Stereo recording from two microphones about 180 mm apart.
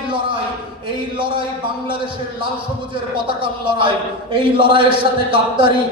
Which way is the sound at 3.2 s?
25° right (ahead or behind).